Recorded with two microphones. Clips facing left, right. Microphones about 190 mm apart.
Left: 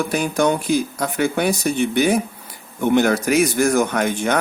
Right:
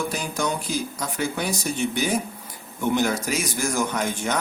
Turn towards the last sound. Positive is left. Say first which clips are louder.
# left 6 dB
turn(degrees=60)  # may be behind; listen again after turning